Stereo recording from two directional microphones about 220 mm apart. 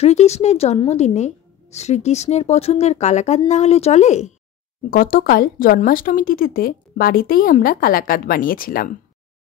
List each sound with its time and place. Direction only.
0.0 s a woman's voice: 30° left (ahead or behind)